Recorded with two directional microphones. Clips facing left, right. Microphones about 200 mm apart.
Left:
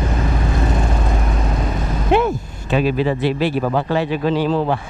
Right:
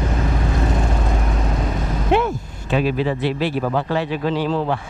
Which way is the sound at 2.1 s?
10° left (ahead or behind).